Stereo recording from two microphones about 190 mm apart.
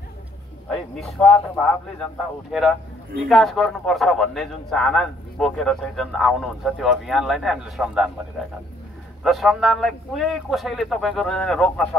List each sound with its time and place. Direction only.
0.7 s a man's voice: 5° left (ahead or behind)
3.3 s a man's voice: centre (ahead or behind)
9.2 s a man's voice: centre (ahead or behind)